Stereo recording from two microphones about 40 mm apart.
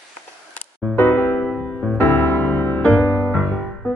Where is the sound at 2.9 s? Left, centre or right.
Left.